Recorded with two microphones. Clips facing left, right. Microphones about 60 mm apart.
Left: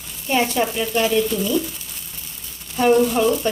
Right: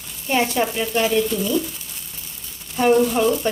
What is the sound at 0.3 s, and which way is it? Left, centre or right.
Speech, centre.